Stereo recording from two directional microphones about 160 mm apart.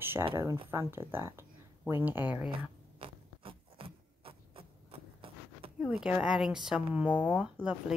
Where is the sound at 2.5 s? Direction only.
30° right (ahead or behind).